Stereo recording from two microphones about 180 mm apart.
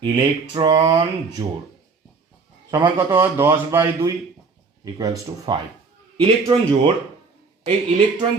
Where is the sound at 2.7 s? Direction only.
25° right (ahead or behind).